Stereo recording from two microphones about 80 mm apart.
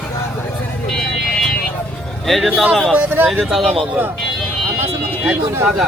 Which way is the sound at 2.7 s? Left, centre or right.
Centre.